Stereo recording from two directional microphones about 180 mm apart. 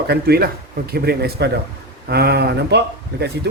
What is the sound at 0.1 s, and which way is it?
Speech, 60° right (ahead or behind).